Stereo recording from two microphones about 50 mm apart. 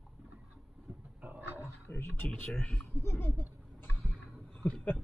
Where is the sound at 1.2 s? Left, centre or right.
Right.